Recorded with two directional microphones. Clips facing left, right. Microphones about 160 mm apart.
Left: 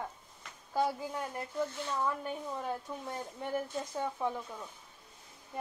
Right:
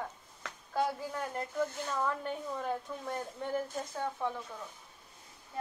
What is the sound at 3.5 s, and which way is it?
Speech, 15° left (ahead or behind).